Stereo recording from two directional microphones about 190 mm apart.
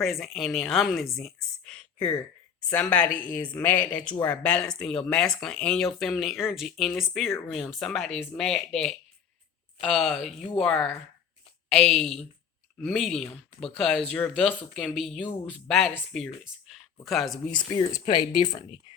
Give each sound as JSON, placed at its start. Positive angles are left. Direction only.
{"t": 0.0, "sound": "speech", "side_deg": 0}
{"t": 2.0, "sound": "speech", "side_deg": 20}
{"t": 2.7, "sound": "speech", "side_deg": 5}
{"t": 17.7, "sound": "speech", "side_deg": 20}